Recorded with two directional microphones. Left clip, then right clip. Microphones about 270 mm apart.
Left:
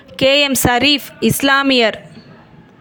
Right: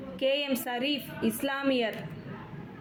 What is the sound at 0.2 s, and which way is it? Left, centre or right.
A woman's voice, left.